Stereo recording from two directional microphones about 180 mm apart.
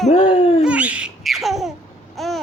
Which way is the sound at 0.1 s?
35° left (ahead or behind).